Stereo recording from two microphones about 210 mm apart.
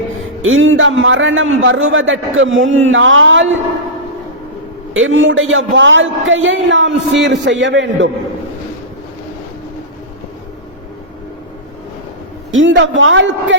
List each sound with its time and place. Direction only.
0.4 s a man's voice: 70° right (ahead or behind)
4.9 s a man's voice: 70° right (ahead or behind)
12.5 s a man's voice: 65° right (ahead or behind)